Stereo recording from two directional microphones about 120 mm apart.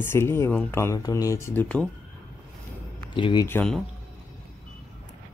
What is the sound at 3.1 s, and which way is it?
Speech, 45° left (ahead or behind).